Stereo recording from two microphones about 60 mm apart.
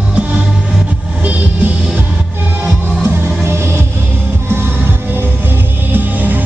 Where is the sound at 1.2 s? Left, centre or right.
Right.